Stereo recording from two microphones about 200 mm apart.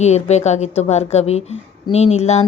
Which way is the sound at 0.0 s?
35° left (ahead or behind).